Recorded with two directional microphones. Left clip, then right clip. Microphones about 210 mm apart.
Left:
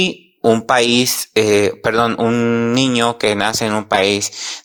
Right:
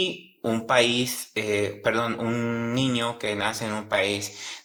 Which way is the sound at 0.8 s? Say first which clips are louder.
Left 9 dB; 10° left (ahead or behind).